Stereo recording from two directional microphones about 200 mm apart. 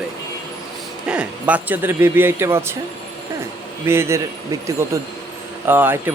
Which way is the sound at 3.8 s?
10° right (ahead or behind).